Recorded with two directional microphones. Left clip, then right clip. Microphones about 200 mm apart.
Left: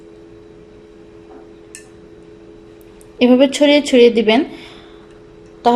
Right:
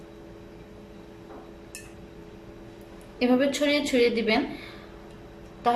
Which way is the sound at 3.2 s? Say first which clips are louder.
Left 12 dB; 45° left (ahead or behind).